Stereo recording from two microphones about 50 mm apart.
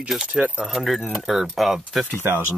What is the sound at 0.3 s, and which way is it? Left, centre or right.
Speech, centre.